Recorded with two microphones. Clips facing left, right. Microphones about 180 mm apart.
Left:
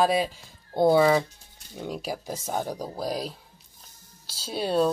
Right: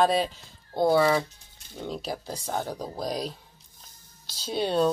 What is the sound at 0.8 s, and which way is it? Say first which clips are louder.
Speech: left 2 dB; 20° left (ahead or behind).